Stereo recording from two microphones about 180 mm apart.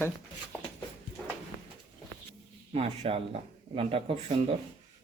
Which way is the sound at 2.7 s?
35° right (ahead or behind).